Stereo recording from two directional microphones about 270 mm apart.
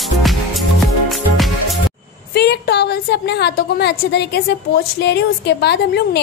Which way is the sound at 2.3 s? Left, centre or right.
Left.